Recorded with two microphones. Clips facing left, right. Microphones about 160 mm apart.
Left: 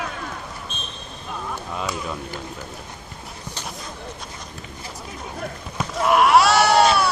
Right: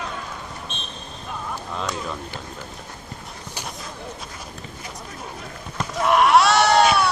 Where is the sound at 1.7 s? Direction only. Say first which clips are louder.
Even; 5° left (ahead or behind).